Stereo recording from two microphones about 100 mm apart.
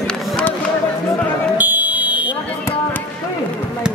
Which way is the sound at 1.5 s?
15° right (ahead or behind).